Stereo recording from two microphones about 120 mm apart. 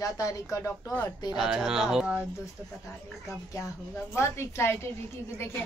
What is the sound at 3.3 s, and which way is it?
A woman's voice, 25° left (ahead or behind).